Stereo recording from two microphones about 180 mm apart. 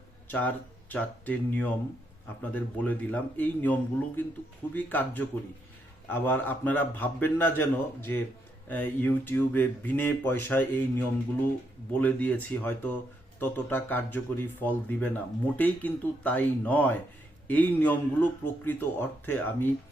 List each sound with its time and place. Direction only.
0.3 s speech: 10° left (ahead or behind)